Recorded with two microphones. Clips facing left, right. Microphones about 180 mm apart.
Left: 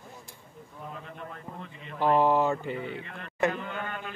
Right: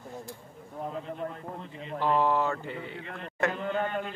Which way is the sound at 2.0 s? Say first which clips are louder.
Left 3 dB; 15° left (ahead or behind).